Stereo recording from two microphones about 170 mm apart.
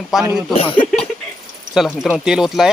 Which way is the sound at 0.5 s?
30° left (ahead or behind).